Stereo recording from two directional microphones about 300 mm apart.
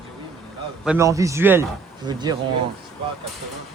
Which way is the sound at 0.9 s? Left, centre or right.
Centre.